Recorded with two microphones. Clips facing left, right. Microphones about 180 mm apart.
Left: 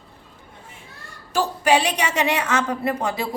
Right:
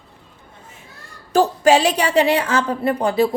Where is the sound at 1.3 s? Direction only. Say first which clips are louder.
Right 5 dB; 40° right (ahead or behind).